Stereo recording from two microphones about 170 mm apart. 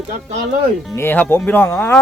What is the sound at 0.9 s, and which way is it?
Speech, 10° left (ahead or behind).